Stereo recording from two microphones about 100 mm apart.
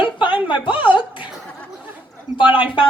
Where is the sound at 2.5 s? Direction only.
55° left (ahead or behind).